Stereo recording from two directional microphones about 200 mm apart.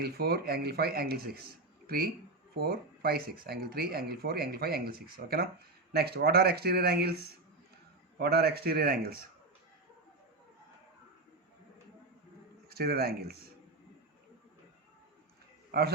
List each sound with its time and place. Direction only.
0.0 s speech: 50° right (ahead or behind)
12.6 s a man's voice: 50° right (ahead or behind)
15.7 s speech: 55° right (ahead or behind)